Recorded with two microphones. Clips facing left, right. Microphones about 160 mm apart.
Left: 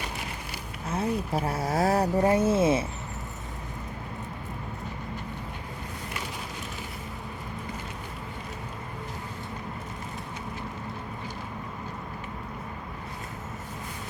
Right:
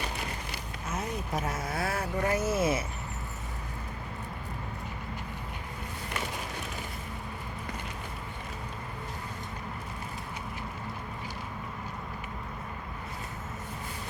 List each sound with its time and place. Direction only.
0.9 s speech: 30° left (ahead or behind)